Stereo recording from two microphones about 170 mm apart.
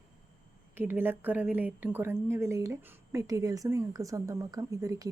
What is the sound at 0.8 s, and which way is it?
A woman's voice, 10° right (ahead or behind).